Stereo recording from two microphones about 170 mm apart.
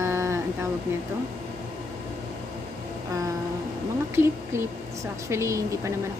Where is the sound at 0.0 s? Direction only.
15° right (ahead or behind).